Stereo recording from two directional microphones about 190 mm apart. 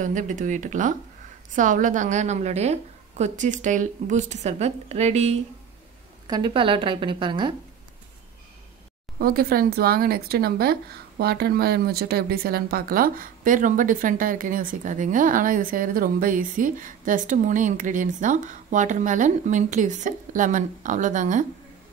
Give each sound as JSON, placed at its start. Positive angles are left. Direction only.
{"t": 0.0, "sound": "a woman's voice", "side_deg": -40}
{"t": 6.2, "sound": "speech", "side_deg": -25}
{"t": 9.2, "sound": "speech", "side_deg": -50}